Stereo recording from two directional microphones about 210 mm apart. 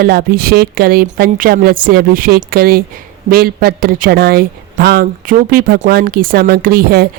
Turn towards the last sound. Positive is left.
turn(degrees=-45)  # may be behind; listen again after turning